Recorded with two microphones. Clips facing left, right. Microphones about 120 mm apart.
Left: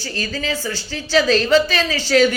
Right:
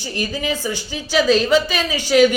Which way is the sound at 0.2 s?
15° right (ahead or behind).